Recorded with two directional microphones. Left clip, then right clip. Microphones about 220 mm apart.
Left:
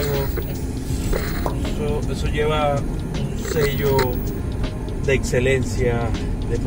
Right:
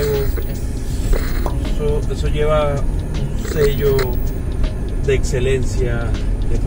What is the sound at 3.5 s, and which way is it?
Speech, centre (ahead or behind).